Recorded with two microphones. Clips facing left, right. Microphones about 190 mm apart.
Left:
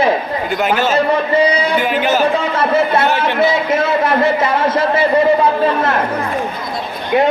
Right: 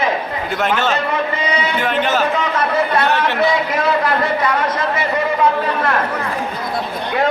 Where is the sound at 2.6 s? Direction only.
25° left (ahead or behind).